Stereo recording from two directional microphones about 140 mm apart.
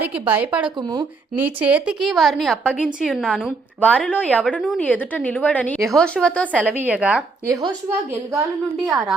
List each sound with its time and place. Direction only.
0.0 s speech: 10° right (ahead or behind)
0.8 s speech: 35° right (ahead or behind)
1.4 s a woman's voice: 10° right (ahead or behind)
3.8 s a woman's voice: 10° left (ahead or behind)
6.8 s speech: 10° right (ahead or behind)
7.4 s a woman's voice: 20° right (ahead or behind)
8.9 s a woman's voice: centre (ahead or behind)